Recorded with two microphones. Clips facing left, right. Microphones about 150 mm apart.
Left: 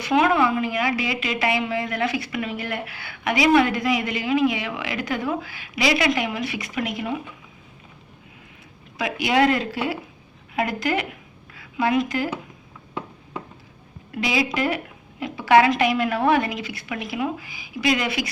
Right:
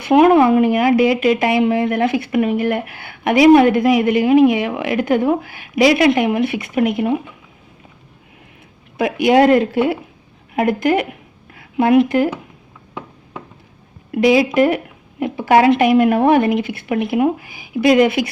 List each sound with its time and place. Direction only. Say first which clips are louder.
0.0 s speech: right 8 dB; 55° right (ahead or behind)
9.0 s speech: right 8 dB; 50° right (ahead or behind)
14.1 s speech: right 11 dB; 50° right (ahead or behind)